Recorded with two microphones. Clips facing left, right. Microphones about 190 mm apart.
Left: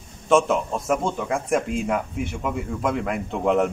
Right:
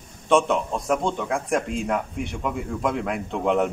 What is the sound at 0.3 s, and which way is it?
Speech, centre (ahead or behind).